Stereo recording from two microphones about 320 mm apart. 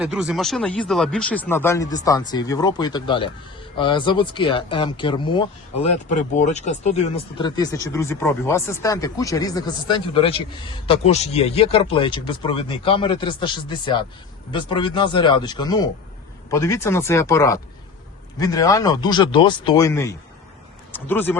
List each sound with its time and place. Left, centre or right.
0.0 s speech: centre